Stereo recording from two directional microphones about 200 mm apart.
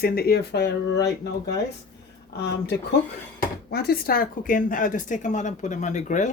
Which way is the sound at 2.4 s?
55° left (ahead or behind).